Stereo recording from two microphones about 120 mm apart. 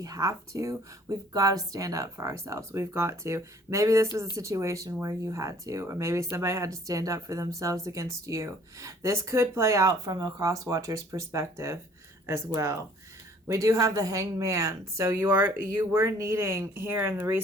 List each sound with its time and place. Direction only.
0.0 s speech: 30° right (ahead or behind)